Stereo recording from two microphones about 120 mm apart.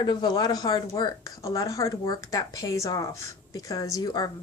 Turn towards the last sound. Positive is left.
turn(degrees=35)  # may be behind; listen again after turning